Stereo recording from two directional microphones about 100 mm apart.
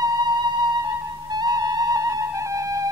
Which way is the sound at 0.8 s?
45° right (ahead or behind).